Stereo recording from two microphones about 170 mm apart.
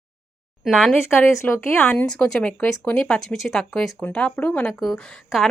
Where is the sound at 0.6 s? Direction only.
Centre (ahead or behind).